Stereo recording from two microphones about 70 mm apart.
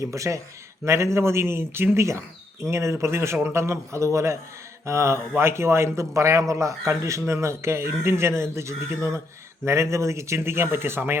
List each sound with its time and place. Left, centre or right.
0.0 s a man's voice: right